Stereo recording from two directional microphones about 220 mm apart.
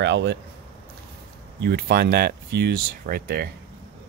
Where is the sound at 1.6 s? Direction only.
45° right (ahead or behind).